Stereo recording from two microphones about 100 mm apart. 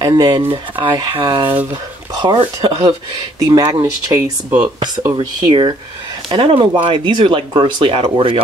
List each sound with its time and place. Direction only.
0.0 s speech: 45° right (ahead or behind)
2.3 s speech: 65° right (ahead or behind)
3.3 s speech: 40° right (ahead or behind)
4.1 s speech: 25° right (ahead or behind)
4.6 s speech: 45° right (ahead or behind)
6.2 s speech: 65° right (ahead or behind)